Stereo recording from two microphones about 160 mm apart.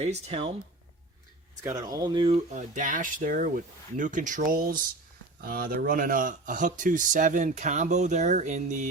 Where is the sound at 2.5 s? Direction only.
55° right (ahead or behind).